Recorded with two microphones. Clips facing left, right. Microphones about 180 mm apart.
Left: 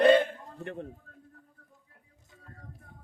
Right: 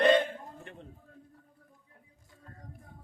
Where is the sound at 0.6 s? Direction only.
60° left (ahead or behind).